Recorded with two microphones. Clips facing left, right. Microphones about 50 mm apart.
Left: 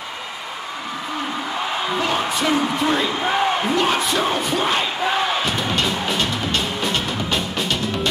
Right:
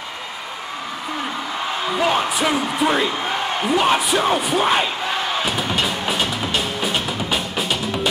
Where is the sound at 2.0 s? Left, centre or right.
Centre.